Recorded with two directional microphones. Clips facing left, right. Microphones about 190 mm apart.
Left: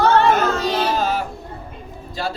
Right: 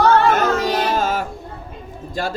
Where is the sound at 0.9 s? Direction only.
50° right (ahead or behind).